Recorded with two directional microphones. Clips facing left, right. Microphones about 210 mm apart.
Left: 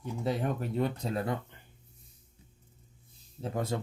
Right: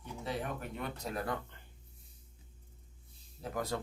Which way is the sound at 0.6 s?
30° left (ahead or behind).